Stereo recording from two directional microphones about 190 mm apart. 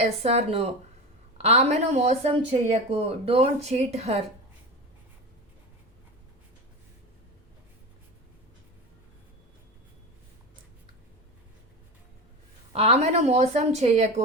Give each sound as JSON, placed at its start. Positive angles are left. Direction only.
{"t": 0.0, "sound": "speech", "side_deg": -35}
{"t": 12.7, "sound": "speech", "side_deg": -35}